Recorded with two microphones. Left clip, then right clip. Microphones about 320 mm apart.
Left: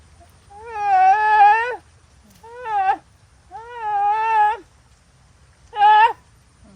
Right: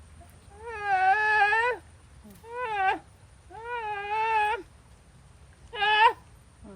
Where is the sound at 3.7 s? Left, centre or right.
Centre.